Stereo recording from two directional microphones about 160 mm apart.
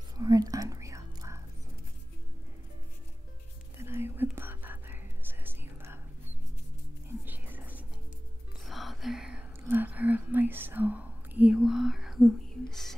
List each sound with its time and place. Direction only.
0.2 s whispering: 20° right (ahead or behind)
3.7 s whispering: 15° right (ahead or behind)
7.2 s whispering: 10° right (ahead or behind)
8.6 s whispering: centre (ahead or behind)